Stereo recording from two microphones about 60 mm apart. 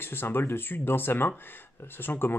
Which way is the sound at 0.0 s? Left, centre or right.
Left.